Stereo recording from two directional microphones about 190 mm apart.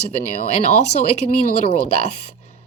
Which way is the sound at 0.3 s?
35° left (ahead or behind).